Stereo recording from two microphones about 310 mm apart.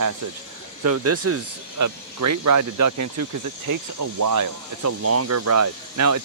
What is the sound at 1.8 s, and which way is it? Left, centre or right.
Speech, right.